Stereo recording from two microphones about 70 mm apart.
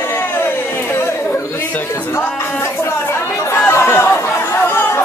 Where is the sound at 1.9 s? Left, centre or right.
Left.